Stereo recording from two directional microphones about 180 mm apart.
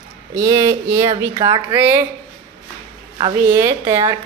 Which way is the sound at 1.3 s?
25° right (ahead or behind).